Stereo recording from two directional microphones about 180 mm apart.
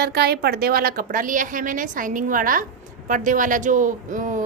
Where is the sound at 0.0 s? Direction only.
60° right (ahead or behind).